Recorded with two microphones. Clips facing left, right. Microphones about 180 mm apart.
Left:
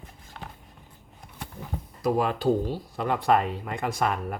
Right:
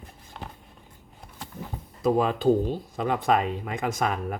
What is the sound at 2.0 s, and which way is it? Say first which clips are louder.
Speech: right 2 dB; 20° right (ahead or behind).